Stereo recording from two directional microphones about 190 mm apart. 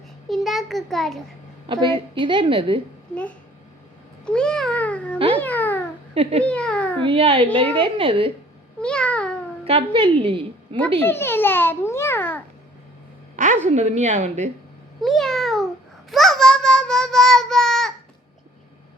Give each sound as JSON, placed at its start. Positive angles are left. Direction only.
{"t": 0.3, "sound": "a child's voice", "side_deg": 0}
{"t": 1.6, "sound": "a woman's voice", "side_deg": -25}
{"t": 4.3, "sound": "cat", "side_deg": 5}
{"t": 5.4, "sound": "babbling", "side_deg": 10}
{"t": 7.0, "sound": "a woman's voice", "side_deg": -25}
{"t": 8.8, "sound": "babbling", "side_deg": 5}
{"t": 9.6, "sound": "a woman's voice", "side_deg": -30}
{"t": 11.0, "sound": "a child's voice", "side_deg": 10}
{"t": 13.3, "sound": "a sound", "side_deg": -40}
{"t": 13.7, "sound": "a woman's voice", "side_deg": -35}
{"t": 15.0, "sound": "speech", "side_deg": 0}
{"t": 16.0, "sound": "child singing", "side_deg": 0}